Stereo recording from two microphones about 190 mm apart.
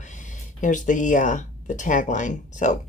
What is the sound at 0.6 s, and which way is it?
Speech, 40° left (ahead or behind).